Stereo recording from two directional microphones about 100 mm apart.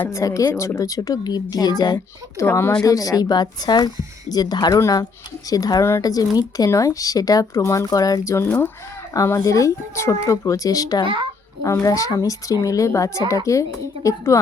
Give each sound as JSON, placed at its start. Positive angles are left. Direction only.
{"t": 0.1, "sound": "speech", "side_deg": 30}
{"t": 2.5, "sound": "speech", "side_deg": 25}
{"t": 2.8, "sound": "speech", "side_deg": 35}
{"t": 8.4, "sound": "speech", "side_deg": 20}
{"t": 9.1, "sound": "speech", "side_deg": 30}